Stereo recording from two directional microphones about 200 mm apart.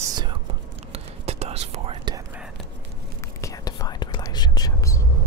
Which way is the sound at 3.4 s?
20° left (ahead or behind).